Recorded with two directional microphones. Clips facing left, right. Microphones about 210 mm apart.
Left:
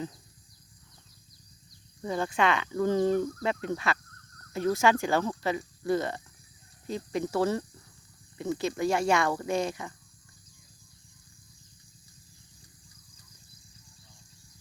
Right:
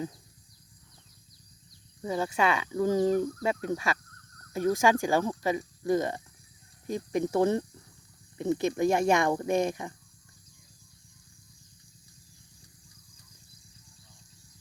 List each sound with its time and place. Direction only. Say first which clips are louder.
2.0 s speech: even; 10° right (ahead or behind)